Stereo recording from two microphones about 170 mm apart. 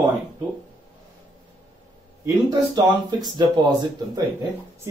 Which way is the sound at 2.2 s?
25° right (ahead or behind).